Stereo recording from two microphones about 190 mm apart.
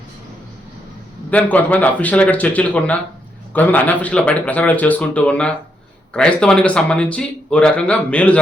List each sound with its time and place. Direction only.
1.3 s speech: 10° left (ahead or behind)